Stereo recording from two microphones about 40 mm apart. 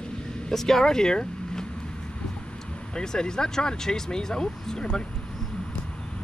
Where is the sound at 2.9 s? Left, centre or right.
Centre.